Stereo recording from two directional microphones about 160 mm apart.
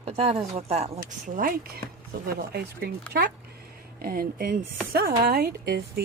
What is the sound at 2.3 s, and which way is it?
Speech, 75° right (ahead or behind).